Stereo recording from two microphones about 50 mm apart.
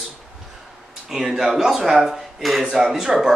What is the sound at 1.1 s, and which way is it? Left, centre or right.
Speech, centre.